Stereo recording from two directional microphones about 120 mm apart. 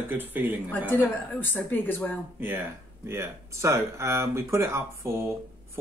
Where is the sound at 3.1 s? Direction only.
20° right (ahead or behind).